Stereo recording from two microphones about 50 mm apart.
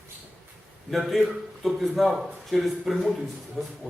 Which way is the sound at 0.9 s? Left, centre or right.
Centre.